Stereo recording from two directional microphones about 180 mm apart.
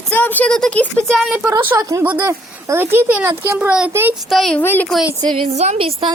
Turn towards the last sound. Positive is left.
turn(degrees=-30)  # may be behind; listen again after turning